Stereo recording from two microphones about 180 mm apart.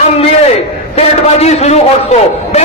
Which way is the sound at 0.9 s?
35° left (ahead or behind).